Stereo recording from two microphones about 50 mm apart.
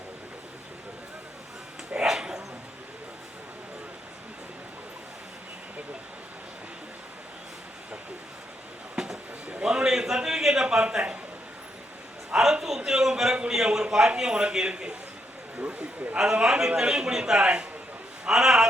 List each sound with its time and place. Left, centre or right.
2.0 s bow-wow: centre
9.5 s a man's voice: right
12.3 s a sound: centre
13.5 s a man's voice: centre
15.5 s speech: right
16.1 s a man's voice: centre
18.3 s a man's voice: centre